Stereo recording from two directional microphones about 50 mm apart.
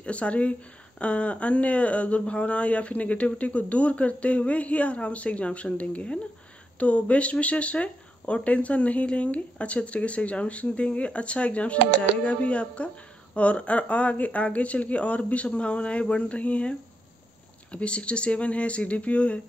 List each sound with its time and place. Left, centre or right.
0.0 s speech: left